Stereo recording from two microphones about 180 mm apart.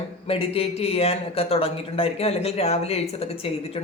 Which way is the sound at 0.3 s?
30° left (ahead or behind).